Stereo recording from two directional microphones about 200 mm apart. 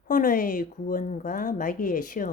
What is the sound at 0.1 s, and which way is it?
A woman's voice, 45° left (ahead or behind).